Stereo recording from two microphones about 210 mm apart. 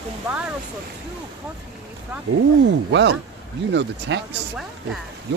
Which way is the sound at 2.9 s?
55° right (ahead or behind).